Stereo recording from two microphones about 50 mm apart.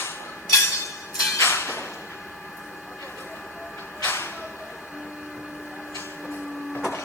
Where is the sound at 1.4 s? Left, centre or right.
Left.